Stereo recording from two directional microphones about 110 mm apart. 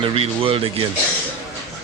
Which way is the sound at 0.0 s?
55° right (ahead or behind).